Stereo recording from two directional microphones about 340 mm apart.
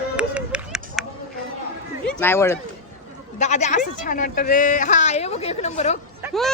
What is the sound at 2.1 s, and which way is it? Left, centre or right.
Speech, centre.